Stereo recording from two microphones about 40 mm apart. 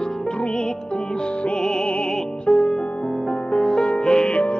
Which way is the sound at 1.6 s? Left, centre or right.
Centre.